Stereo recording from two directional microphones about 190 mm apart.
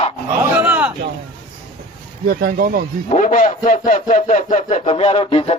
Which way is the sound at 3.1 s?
40° left (ahead or behind).